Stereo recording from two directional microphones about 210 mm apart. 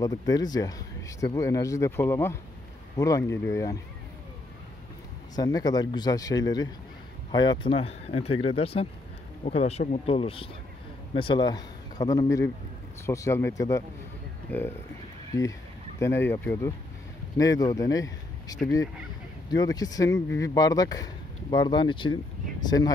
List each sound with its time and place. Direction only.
0.0 s speech: 15° left (ahead or behind)
5.3 s speech: 20° left (ahead or behind)